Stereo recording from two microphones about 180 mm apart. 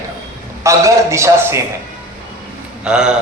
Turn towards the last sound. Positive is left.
turn(degrees=-5)  # may be behind; listen again after turning